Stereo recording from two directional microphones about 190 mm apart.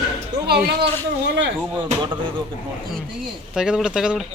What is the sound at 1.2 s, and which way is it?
Speech, 65° right (ahead or behind).